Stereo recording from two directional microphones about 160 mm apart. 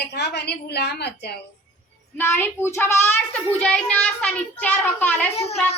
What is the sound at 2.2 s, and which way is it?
A child's voice, 15° left (ahead or behind).